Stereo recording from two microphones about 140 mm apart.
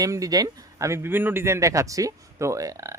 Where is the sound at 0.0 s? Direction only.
25° right (ahead or behind).